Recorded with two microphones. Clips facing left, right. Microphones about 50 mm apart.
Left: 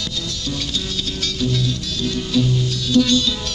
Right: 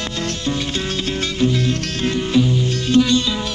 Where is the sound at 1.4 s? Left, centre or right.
Right.